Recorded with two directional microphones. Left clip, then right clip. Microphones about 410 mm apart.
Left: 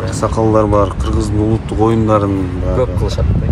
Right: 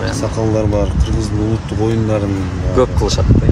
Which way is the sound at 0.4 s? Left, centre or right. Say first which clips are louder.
Left 6 dB; centre.